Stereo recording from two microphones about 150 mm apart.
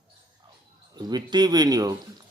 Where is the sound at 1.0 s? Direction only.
30° right (ahead or behind).